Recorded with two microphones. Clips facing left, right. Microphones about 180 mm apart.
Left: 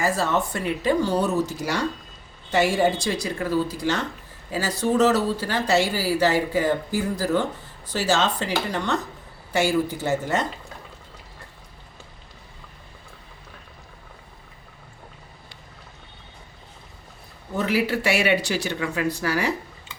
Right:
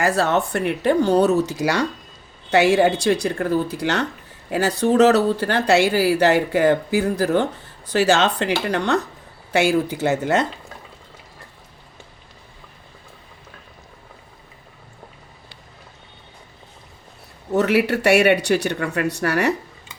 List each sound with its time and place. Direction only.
0.0 s speech: 70° right (ahead or behind); by 1.8 s 90° right
2.5 s speech: 75° right (ahead or behind)
17.6 s speech: 70° right (ahead or behind)